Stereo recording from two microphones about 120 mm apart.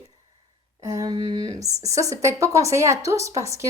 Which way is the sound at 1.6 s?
25° right (ahead or behind).